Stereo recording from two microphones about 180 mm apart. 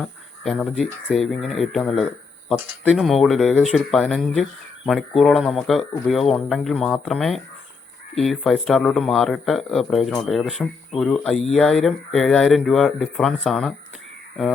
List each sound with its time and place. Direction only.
0.0 s speech: centre (ahead or behind)